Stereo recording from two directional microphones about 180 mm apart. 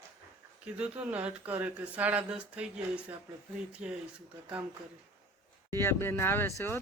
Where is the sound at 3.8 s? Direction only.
5° right (ahead or behind).